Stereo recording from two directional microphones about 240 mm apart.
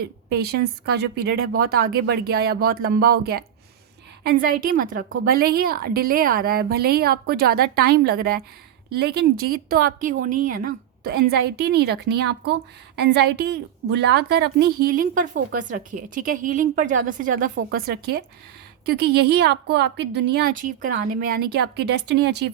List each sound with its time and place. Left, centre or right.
0.3 s a woman's voice: right